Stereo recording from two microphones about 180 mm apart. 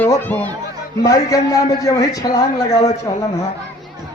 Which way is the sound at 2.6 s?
40° left (ahead or behind).